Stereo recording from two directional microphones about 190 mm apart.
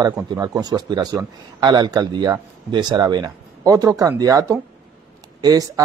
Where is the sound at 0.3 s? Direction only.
20° right (ahead or behind).